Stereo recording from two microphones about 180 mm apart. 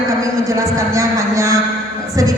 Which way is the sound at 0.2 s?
15° right (ahead or behind).